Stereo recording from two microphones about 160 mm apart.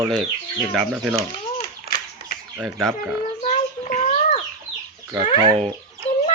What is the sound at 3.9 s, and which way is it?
Bird, 55° left (ahead or behind).